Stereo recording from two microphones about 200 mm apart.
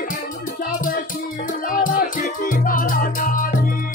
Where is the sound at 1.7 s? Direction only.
45° left (ahead or behind).